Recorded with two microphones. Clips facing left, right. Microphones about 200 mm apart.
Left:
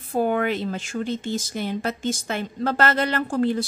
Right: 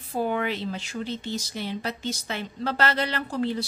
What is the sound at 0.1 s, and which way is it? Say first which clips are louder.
Speech: left 5 dB; 50° left (ahead or behind).